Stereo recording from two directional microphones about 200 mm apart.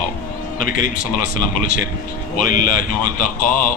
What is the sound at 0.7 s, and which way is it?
Speech, 45° left (ahead or behind).